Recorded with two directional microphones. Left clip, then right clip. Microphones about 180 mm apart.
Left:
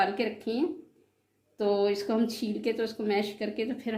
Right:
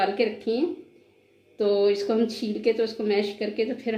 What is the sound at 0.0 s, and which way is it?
Speech, 50° left (ahead or behind).